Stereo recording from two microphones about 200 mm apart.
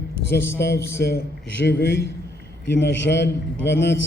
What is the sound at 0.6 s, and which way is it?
A man's voice, 50° left (ahead or behind).